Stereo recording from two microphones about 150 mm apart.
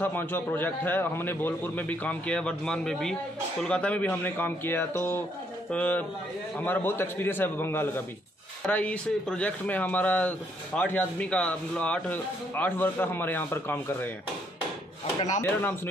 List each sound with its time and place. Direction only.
0.0 s speech: 15° left (ahead or behind)
15.4 s speech: 15° left (ahead or behind)